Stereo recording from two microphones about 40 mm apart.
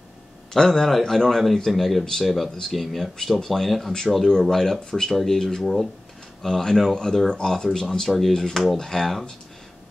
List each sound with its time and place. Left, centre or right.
0.5 s a man's voice: centre